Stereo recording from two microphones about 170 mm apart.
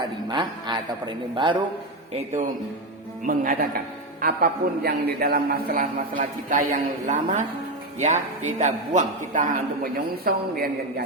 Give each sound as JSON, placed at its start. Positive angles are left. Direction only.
{"t": 0.0, "sound": "a man's voice", "side_deg": -25}
{"t": 2.1, "sound": "a man's voice", "side_deg": -40}
{"t": 3.2, "sound": "a man's voice", "side_deg": -55}